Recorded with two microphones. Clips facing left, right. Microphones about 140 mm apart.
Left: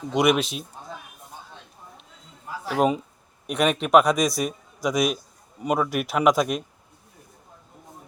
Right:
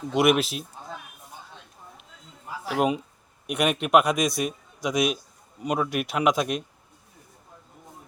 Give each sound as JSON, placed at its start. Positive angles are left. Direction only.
{"t": 0.1, "sound": "a man's voice", "side_deg": -5}
{"t": 2.6, "sound": "a man's voice", "side_deg": -5}